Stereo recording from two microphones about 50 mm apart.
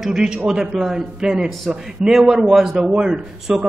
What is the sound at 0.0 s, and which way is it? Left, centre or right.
A man's voice, centre.